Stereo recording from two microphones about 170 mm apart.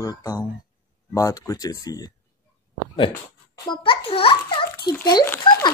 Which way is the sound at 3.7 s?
30° left (ahead or behind).